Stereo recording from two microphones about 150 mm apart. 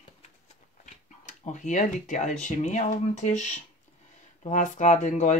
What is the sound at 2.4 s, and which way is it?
Speech, 50° left (ahead or behind).